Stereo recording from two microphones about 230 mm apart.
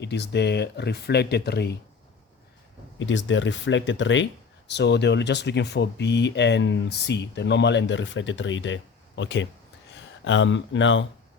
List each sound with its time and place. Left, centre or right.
0.0 s speech: left
3.0 s speech: left